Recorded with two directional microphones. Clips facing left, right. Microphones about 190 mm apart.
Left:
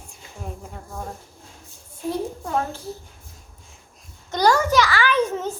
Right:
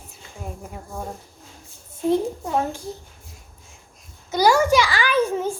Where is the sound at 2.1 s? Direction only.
15° right (ahead or behind).